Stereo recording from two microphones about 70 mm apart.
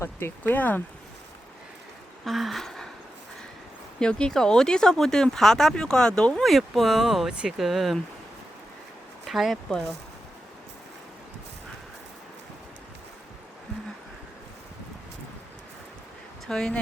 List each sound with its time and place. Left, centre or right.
0.0 s speech: left
0.4 s speech: left
2.2 s speech: centre
4.0 s speech: centre
9.2 s speech: centre
16.5 s speech: centre